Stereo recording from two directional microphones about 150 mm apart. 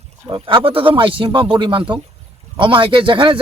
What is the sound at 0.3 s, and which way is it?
Speech, 35° right (ahead or behind).